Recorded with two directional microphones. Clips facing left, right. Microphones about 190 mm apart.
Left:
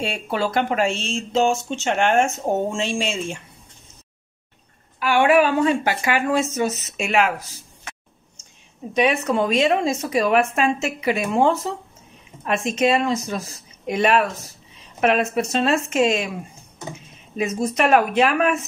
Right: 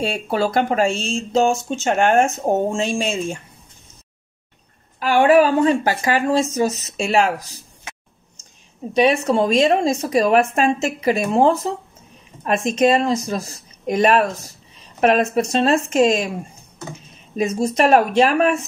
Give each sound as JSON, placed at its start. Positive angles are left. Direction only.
{"t": 0.0, "sound": "a woman's voice", "side_deg": -40}
{"t": 5.0, "sound": "a woman's voice", "side_deg": -40}
{"t": 8.9, "sound": "a woman's voice", "side_deg": -30}
{"t": 17.4, "sound": "a woman's voice", "side_deg": -30}